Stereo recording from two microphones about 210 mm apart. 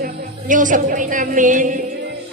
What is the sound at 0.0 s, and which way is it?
A woman's voice, 40° right (ahead or behind).